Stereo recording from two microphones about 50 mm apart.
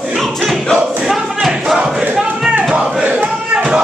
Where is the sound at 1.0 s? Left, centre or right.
Centre.